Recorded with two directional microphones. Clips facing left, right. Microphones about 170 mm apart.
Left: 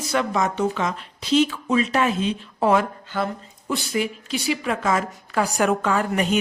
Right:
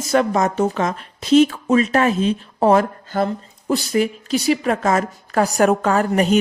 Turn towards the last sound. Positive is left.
turn(degrees=-40)  # may be behind; listen again after turning